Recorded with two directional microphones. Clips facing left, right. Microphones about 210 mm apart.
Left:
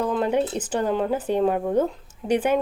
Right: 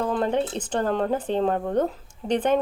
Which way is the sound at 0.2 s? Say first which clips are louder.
Left 2 dB; 10° left (ahead or behind).